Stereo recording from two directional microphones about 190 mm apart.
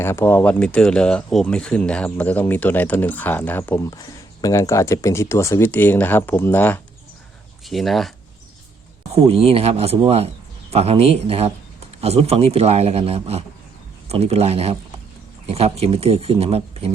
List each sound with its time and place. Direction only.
0.0 s speech: 15° left (ahead or behind)
7.6 s speech: centre (ahead or behind)
9.1 s speech: 30° right (ahead or behind)